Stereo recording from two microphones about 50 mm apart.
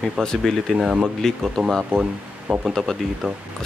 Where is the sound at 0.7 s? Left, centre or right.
Centre.